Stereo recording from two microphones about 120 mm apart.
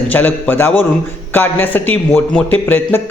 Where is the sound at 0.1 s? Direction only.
15° left (ahead or behind).